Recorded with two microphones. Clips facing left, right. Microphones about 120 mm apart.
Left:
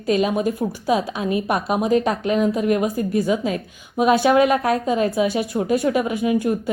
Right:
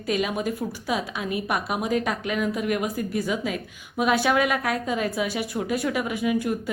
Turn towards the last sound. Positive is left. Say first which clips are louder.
# left 5 dB
turn(degrees=25)  # may be behind; listen again after turning